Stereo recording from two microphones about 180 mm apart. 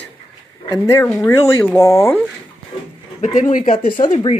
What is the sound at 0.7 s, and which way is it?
Speech, 15° left (ahead or behind).